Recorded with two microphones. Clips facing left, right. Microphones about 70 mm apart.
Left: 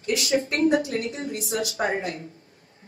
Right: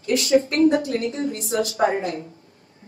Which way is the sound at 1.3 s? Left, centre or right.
Left.